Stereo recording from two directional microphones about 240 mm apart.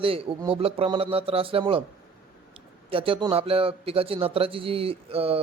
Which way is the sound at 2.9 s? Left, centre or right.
Right.